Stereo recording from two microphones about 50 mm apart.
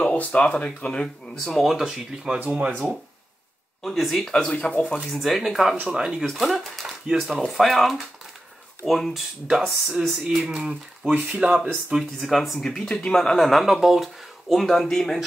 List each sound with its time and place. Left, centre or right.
0.0 s speech: left; by 2.3 s centre
2.3 s speech: right
3.8 s speech: centre
4.6 s speech: centre
5.1 s speech: centre
6.2 s speech: centre
10.2 s speech: centre
12.2 s speech: centre